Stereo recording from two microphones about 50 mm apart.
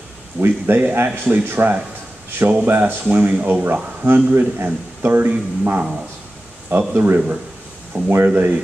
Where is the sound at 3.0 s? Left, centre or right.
Right.